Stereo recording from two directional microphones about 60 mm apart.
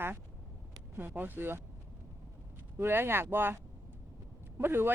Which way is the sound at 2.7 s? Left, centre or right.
Right.